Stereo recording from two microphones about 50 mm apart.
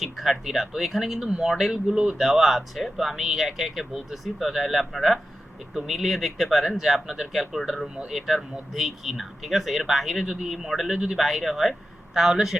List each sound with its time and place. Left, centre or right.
0.0 s speech: centre
1.7 s speech: centre
2.1 s speech: centre